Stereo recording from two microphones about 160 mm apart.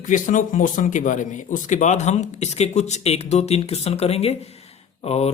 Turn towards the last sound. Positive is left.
turn(degrees=40)  # may be behind; listen again after turning